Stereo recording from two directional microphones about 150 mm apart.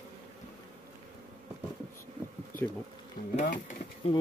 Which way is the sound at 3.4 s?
65° left (ahead or behind).